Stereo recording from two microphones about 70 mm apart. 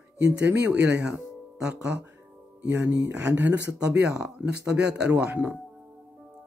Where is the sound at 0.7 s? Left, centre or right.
Centre.